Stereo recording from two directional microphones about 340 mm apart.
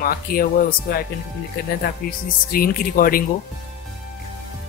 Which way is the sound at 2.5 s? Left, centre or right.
Left.